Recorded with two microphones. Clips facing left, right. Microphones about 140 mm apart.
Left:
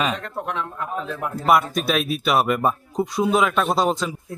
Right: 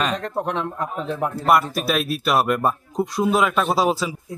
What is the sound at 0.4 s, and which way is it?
Speech, 35° right (ahead or behind).